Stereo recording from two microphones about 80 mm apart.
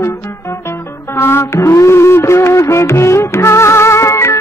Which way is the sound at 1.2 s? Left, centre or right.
Left.